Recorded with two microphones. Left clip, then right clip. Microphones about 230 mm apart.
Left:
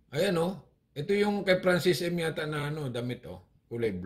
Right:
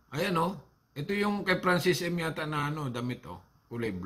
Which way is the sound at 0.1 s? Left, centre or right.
Centre.